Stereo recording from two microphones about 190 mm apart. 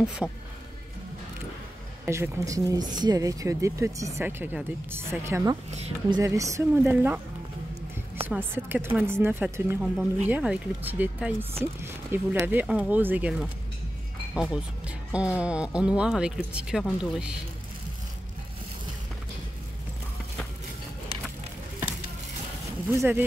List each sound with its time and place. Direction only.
0.0 s speech: 5° right (ahead or behind)
2.0 s speech: 15° right (ahead or behind)
5.7 s speech: 35° right (ahead or behind)
6.1 s speech: 15° right (ahead or behind)
8.3 s speech: 10° right (ahead or behind)
22.8 s speech: 10° right (ahead or behind)